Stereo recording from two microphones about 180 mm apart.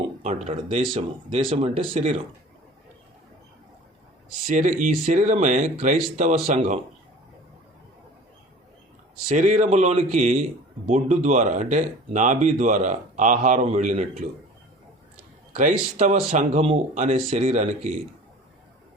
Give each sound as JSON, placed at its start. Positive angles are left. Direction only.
{"t": 0.9, "sound": "speech", "side_deg": -30}
{"t": 4.4, "sound": "speech", "side_deg": -45}
{"t": 9.3, "sound": "speech", "side_deg": -45}
{"t": 15.5, "sound": "speech", "side_deg": -45}
{"t": 17.2, "sound": "speech", "side_deg": -30}
{"t": 17.4, "sound": "speech", "side_deg": -45}